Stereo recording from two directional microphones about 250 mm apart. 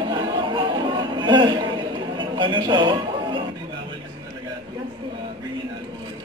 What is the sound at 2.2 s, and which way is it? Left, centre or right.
A man's voice, centre.